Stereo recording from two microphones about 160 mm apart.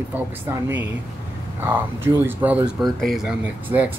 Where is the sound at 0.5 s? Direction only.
15° right (ahead or behind).